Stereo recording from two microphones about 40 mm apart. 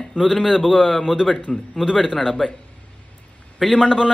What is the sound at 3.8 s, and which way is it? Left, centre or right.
Speech, centre.